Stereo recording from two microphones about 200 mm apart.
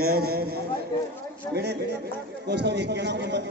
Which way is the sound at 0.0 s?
50° right (ahead or behind).